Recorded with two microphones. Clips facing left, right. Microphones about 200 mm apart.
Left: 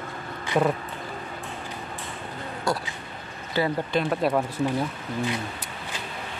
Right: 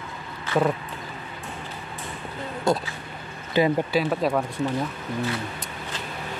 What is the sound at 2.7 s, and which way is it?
Speech, 20° right (ahead or behind).